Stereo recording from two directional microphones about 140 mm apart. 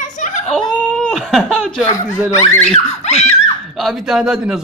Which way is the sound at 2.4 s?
15° left (ahead or behind).